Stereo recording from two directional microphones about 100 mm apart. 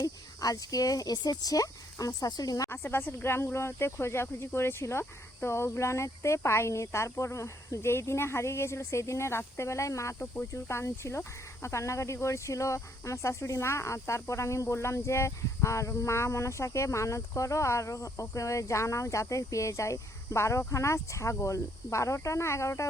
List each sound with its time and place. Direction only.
0.0 s speech: 35° left (ahead or behind)
2.6 s speech: 25° left (ahead or behind)